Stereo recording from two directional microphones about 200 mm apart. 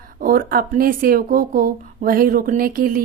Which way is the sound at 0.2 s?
45° right (ahead or behind).